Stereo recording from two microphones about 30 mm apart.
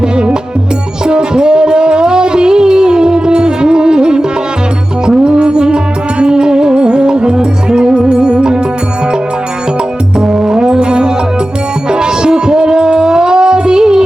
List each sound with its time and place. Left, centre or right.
1.0 s music: right
10.2 s music: right